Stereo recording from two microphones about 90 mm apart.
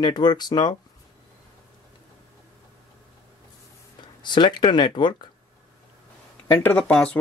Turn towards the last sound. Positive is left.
turn(degrees=15)  # may be behind; listen again after turning